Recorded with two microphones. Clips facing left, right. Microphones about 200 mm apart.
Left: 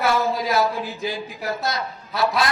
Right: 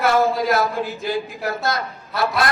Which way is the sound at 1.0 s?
55° right (ahead or behind).